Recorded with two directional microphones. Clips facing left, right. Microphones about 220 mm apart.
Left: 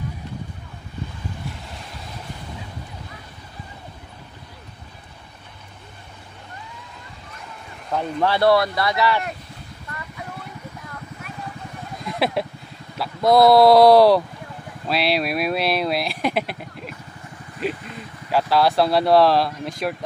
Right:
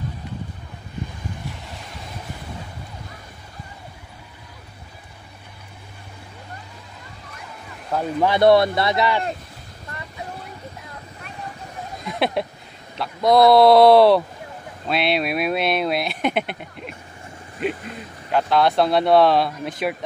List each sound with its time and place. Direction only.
7.9 s speech: 5° right (ahead or behind)
8.3 s speech: 20° right (ahead or behind)
12.1 s a sound: centre (ahead or behind)
12.9 s speech: 5° left (ahead or behind)